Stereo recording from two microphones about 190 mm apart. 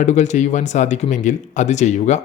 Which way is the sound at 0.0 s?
40° left (ahead or behind).